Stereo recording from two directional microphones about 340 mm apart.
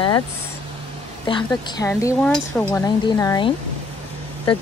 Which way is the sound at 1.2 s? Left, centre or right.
Centre.